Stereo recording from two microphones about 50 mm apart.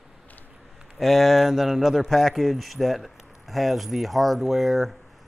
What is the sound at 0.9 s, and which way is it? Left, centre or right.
Speech, centre.